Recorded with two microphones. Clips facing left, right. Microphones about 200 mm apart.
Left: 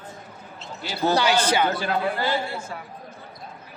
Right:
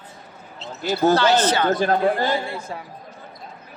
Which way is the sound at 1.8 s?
45° right (ahead or behind).